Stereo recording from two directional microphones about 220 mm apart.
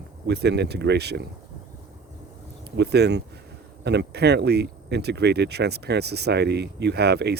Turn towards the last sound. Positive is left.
turn(degrees=-50)  # may be behind; listen again after turning